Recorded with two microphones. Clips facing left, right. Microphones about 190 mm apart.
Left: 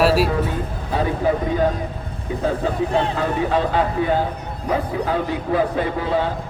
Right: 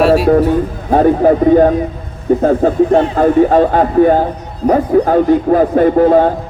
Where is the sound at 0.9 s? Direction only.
50° right (ahead or behind).